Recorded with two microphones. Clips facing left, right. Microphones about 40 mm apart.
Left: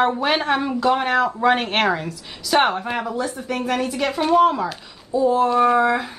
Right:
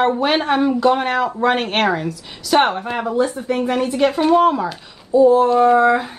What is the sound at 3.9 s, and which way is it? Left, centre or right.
Speech, centre.